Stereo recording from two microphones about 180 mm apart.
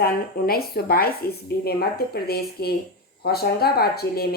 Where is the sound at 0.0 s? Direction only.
55° left (ahead or behind).